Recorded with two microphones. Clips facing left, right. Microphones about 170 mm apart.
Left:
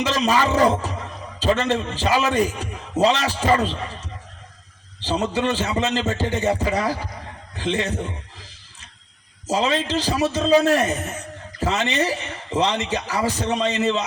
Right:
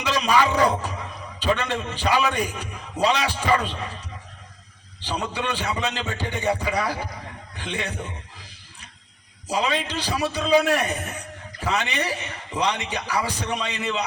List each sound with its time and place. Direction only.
0.0 s a man's voice: 40° left (ahead or behind)
9.5 s a man's voice: 40° left (ahead or behind)